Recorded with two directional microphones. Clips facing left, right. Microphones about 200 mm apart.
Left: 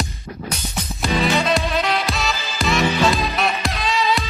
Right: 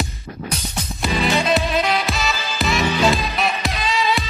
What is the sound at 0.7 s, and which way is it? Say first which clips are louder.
Music: left 2 dB; centre (ahead or behind).